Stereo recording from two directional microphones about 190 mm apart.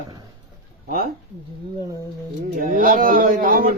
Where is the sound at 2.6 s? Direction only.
45° right (ahead or behind).